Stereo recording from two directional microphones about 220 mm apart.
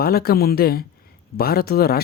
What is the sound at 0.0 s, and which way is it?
A man's voice, 45° left (ahead or behind).